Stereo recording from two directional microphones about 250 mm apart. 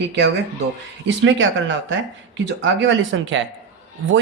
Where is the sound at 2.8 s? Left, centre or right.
Right.